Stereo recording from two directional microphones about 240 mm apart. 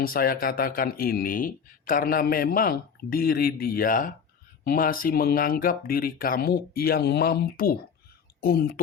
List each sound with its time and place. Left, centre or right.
0.0 s speech: left